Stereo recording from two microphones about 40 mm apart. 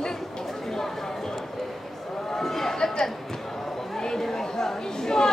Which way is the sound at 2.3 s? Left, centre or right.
Centre.